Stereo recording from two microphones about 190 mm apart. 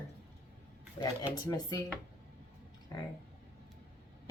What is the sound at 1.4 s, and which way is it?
Speech, 20° left (ahead or behind).